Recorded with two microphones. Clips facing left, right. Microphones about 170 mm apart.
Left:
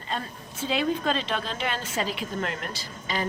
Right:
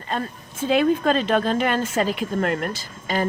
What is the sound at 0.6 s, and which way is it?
A woman's voice, 50° right (ahead or behind).